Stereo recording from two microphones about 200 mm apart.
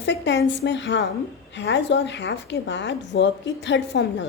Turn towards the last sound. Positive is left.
turn(degrees=60)  # may be behind; listen again after turning